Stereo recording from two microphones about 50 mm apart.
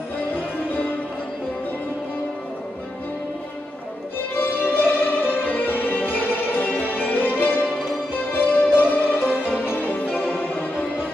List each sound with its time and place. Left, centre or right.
4.4 s music: left